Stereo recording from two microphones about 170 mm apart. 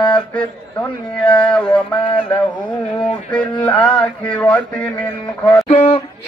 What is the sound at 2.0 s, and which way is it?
Speech, 30° left (ahead or behind).